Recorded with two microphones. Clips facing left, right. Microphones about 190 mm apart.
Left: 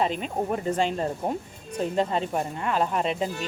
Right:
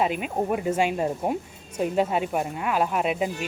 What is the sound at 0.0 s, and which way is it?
Speech, 10° right (ahead or behind).